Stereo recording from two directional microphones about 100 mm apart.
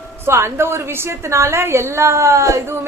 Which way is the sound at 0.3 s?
25° right (ahead or behind).